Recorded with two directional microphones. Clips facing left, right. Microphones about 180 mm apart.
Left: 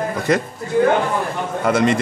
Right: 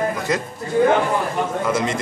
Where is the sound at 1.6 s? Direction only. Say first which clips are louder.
Left 8 dB; 65° left (ahead or behind).